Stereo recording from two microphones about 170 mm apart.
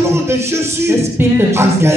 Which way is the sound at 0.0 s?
15° right (ahead or behind).